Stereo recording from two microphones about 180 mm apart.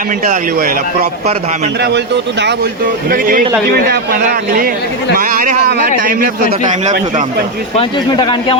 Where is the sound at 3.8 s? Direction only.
60° right (ahead or behind).